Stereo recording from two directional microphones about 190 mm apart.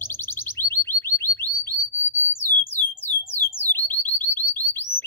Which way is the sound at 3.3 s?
10° left (ahead or behind).